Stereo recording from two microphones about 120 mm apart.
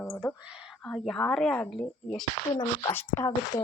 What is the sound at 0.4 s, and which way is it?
Speech, 5° right (ahead or behind).